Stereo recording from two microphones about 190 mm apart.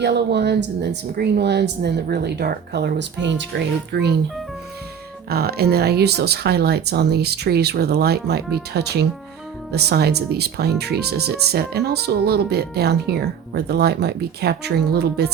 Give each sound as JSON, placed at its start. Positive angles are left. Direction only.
{"t": 0.0, "sound": "speech", "side_deg": -60}
{"t": 5.3, "sound": "speech", "side_deg": -55}